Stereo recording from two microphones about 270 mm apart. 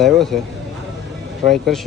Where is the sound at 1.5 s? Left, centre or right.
Centre.